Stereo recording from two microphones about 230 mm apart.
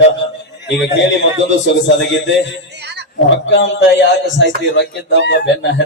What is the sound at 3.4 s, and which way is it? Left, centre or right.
A man's voice, left.